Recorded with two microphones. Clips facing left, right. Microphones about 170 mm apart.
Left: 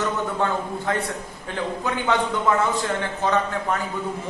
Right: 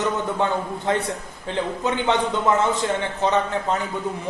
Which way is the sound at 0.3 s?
20° right (ahead or behind).